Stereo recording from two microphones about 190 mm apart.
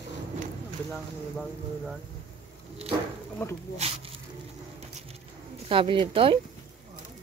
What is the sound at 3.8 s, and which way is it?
Speech, 35° right (ahead or behind).